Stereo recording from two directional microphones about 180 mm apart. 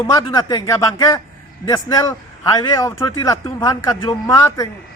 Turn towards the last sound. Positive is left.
turn(degrees=20)  # may be behind; listen again after turning